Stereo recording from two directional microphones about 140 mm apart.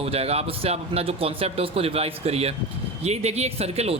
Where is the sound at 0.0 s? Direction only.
45° right (ahead or behind).